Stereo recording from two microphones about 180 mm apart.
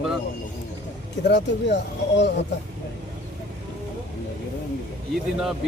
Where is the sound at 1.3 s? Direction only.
75° left (ahead or behind).